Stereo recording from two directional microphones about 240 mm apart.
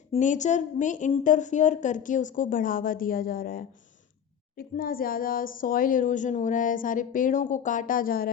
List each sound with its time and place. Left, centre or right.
0.1 s speech: left